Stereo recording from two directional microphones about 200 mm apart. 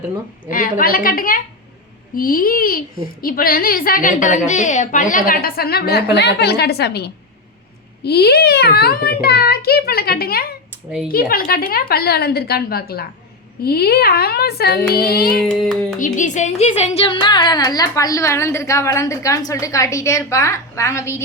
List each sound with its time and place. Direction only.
0.4 s a woman's voice: 45° left (ahead or behind)
15.4 s child singing: 5° left (ahead or behind)
16.0 s a woman's voice: 40° left (ahead or behind); by 21.2 s 15° left (ahead or behind)